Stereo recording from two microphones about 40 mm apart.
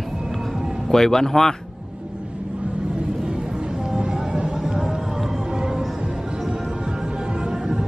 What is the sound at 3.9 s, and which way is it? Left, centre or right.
Vehicle, centre.